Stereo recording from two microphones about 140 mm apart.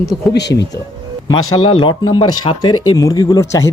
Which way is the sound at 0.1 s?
Centre (ahead or behind).